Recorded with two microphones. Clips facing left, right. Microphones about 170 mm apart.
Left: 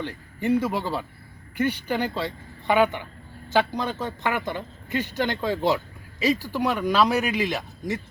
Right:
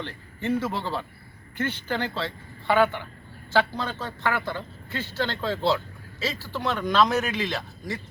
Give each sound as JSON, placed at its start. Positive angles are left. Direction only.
{"t": 0.0, "sound": "a man's voice", "side_deg": 15}